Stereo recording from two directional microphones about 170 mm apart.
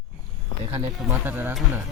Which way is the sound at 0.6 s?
35° right (ahead or behind).